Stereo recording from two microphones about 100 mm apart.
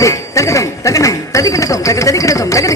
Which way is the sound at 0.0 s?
30° left (ahead or behind).